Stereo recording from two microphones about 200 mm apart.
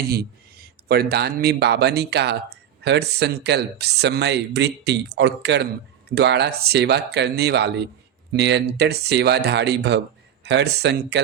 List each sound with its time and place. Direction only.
0.1 s speech: 50° right (ahead or behind)